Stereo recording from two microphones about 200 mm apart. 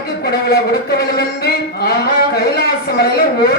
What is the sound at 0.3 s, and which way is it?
Speech, 50° left (ahead or behind).